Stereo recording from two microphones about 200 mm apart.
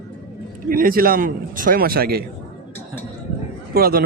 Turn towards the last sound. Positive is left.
turn(degrees=-50)  # may be behind; listen again after turning